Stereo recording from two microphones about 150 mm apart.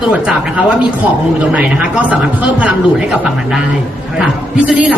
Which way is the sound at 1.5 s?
10° right (ahead or behind).